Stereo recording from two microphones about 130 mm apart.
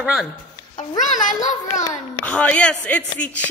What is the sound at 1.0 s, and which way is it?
Speech, 75° left (ahead or behind).